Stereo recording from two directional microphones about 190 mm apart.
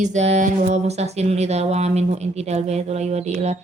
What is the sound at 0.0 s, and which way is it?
Speech, 35° right (ahead or behind).